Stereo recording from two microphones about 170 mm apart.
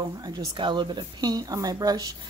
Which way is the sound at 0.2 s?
25° right (ahead or behind).